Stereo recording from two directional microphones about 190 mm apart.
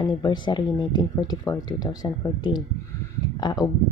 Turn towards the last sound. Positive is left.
turn(degrees=20)  # may be behind; listen again after turning